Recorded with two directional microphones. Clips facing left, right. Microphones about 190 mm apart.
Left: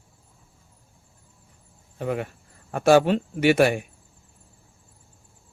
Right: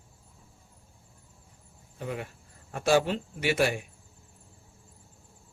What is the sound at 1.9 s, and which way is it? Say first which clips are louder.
Speech: left 8 dB; 65° left (ahead or behind).